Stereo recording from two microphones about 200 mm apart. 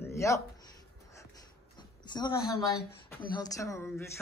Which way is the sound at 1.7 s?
20° left (ahead or behind).